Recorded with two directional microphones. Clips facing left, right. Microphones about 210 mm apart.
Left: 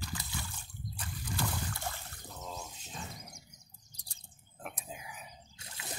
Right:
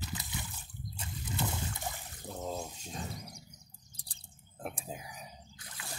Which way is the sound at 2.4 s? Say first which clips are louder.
Right 6 dB; 40° right (ahead or behind).